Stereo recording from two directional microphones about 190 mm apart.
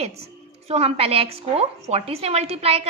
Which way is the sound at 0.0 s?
35° right (ahead or behind).